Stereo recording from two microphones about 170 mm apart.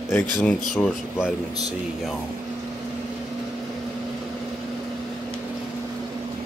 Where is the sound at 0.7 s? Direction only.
Centre (ahead or behind).